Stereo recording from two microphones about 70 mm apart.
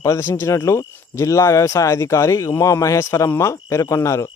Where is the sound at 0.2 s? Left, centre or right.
Left.